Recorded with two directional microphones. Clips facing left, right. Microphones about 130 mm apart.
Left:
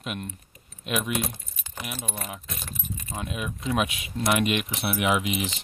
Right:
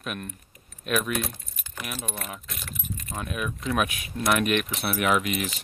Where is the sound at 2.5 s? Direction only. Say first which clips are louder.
Left 1 dB; 30° left (ahead or behind).